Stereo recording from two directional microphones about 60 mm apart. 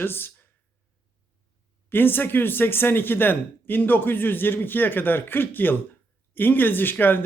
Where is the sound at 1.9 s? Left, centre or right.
Left.